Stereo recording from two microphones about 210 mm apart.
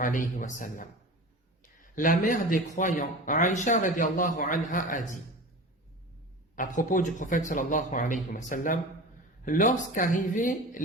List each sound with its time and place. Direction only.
0.0 s speech: 40° left (ahead or behind)
6.6 s speech: 40° left (ahead or behind)